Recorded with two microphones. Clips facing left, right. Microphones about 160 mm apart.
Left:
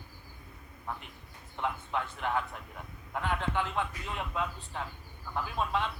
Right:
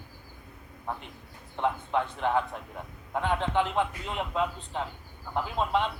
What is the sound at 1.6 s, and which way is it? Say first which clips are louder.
A man's voice: right 6 dB; 20° right (ahead or behind).